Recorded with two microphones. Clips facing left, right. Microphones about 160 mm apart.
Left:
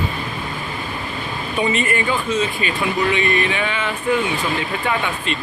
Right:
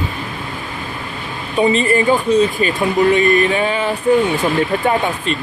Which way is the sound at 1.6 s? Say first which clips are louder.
Right 7 dB; 35° right (ahead or behind).